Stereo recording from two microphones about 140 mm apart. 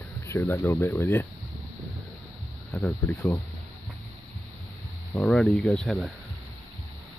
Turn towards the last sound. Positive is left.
turn(degrees=0)  # may be behind; listen again after turning